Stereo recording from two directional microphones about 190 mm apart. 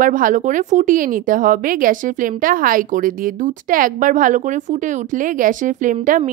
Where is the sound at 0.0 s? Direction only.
45° right (ahead or behind).